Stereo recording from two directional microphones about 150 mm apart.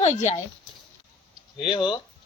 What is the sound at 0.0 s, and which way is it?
Speech, 50° left (ahead or behind).